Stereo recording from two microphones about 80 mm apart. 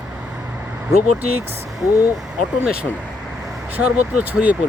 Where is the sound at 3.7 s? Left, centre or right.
Centre.